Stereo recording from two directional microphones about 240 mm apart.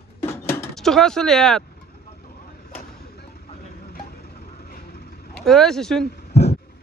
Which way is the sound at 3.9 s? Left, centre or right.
Left.